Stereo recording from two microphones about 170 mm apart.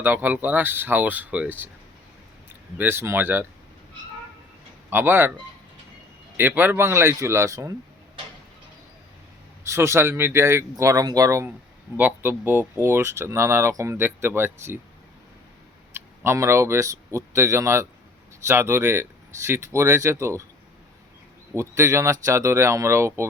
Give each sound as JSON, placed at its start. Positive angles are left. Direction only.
{"t": 0.0, "sound": "speech", "side_deg": -10}
{"t": 2.7, "sound": "speech", "side_deg": -15}
{"t": 4.9, "sound": "speech", "side_deg": -10}
{"t": 6.3, "sound": "speech", "side_deg": -10}
{"t": 9.6, "sound": "speech", "side_deg": -15}
{"t": 16.0, "sound": "speech", "side_deg": -15}
{"t": 21.5, "sound": "speech", "side_deg": -15}